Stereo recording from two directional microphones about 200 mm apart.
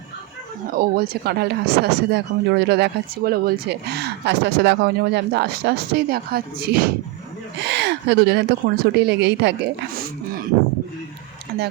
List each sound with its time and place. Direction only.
0.8 s speech: 50° right (ahead or behind)
7.6 s speech: 60° right (ahead or behind)